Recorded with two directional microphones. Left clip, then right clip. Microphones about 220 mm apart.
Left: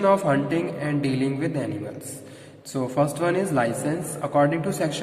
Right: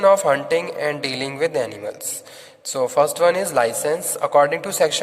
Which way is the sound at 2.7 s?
45° right (ahead or behind).